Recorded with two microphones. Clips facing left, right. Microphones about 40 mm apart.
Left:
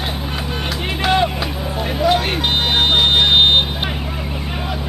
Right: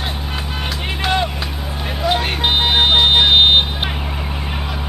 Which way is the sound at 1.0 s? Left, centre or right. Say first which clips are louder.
Left 3 dB; centre.